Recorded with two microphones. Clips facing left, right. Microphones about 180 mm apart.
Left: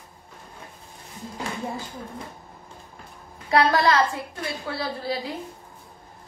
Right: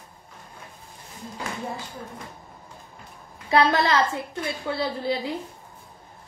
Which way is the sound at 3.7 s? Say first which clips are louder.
Left 1 dB; 25° right (ahead or behind).